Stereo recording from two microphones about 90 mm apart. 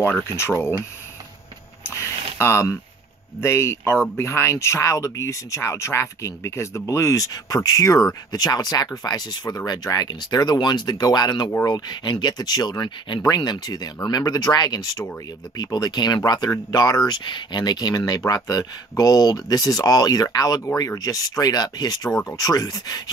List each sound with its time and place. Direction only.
0.0 s speech: 25° left (ahead or behind)
1.9 s a sound: 30° left (ahead or behind)
3.3 s speech: 30° left (ahead or behind); by 13.2 s 60° left (ahead or behind)
13.2 s speech: 45° left (ahead or behind)